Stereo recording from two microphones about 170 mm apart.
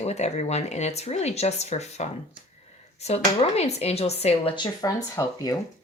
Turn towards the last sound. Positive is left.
turn(degrees=15)  # may be behind; listen again after turning